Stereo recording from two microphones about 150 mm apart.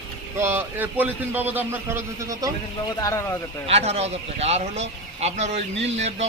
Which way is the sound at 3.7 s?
45° right (ahead or behind).